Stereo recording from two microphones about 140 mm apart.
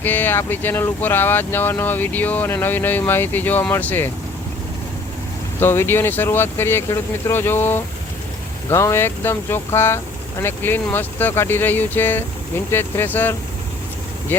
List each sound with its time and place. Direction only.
0.0 s speech: 15° left (ahead or behind)
5.5 s speech: 15° left (ahead or behind)